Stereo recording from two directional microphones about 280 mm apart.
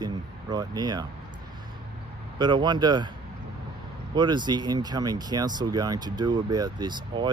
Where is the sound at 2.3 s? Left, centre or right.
Centre.